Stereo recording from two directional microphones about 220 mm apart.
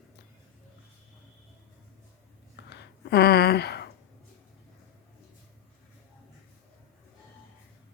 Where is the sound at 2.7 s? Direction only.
50° left (ahead or behind).